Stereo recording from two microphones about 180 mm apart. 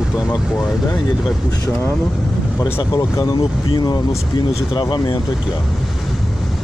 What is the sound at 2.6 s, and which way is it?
Speech, 25° left (ahead or behind).